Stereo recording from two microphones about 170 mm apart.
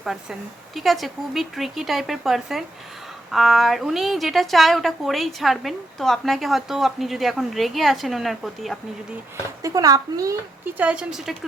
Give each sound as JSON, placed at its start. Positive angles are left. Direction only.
{"t": 0.0, "sound": "a woman's voice", "side_deg": 0}
{"t": 9.6, "sound": "speech", "side_deg": -20}
{"t": 10.8, "sound": "a woman's voice", "side_deg": -5}